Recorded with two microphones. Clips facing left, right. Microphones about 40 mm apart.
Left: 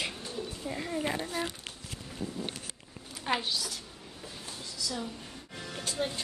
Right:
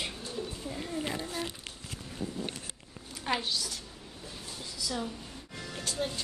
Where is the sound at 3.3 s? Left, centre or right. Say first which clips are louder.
Left 1 dB; centre.